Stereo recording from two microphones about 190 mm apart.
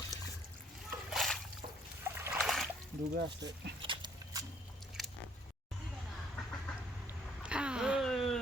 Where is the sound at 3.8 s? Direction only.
25° right (ahead or behind).